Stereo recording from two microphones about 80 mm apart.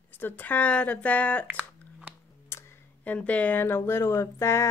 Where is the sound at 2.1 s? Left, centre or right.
Centre.